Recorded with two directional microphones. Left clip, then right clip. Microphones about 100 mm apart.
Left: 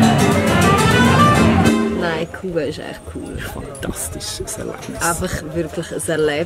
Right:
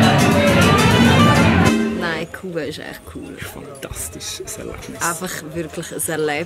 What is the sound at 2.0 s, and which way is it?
Music, 15° right (ahead or behind).